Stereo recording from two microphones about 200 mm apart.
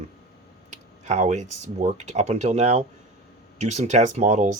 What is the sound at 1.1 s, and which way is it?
Speech, 35° right (ahead or behind).